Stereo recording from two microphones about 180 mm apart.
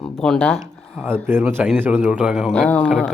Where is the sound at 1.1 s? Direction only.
10° right (ahead or behind).